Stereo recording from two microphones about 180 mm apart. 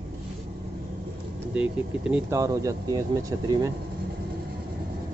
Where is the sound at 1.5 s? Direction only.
5° right (ahead or behind).